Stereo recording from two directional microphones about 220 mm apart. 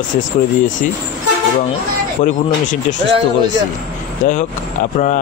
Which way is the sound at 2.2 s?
35° left (ahead or behind).